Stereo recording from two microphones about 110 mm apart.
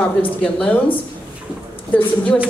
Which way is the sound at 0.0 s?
10° left (ahead or behind).